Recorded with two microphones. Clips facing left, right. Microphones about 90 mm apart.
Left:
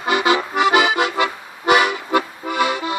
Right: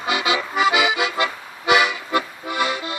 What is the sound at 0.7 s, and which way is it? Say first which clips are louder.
Accordion: left 4 dB; 50° left (ahead or behind).